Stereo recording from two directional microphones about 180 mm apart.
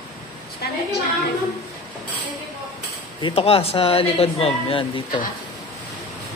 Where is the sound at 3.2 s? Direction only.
30° left (ahead or behind).